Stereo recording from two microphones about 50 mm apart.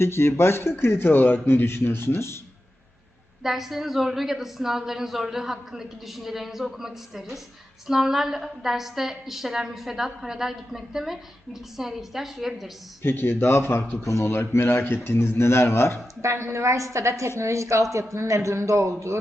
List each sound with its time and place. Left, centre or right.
0.0 s a man's voice: left
3.4 s a woman's voice: centre
13.0 s speech: left
14.0 s speech: left
14.3 s a man's voice: left
16.2 s a woman's voice: right